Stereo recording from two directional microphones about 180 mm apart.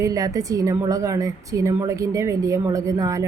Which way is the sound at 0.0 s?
20° right (ahead or behind).